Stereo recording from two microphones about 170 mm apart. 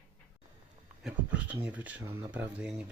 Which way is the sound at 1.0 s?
10° right (ahead or behind).